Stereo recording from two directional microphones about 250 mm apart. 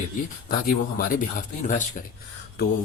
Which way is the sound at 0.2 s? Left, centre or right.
Left.